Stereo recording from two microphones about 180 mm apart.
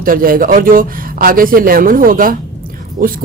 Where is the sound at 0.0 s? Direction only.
50° right (ahead or behind).